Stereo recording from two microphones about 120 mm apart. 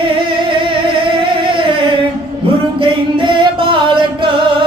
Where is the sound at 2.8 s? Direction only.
45° right (ahead or behind).